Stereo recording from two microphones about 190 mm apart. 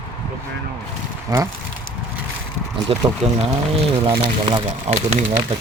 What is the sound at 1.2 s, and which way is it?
Speech, 15° right (ahead or behind).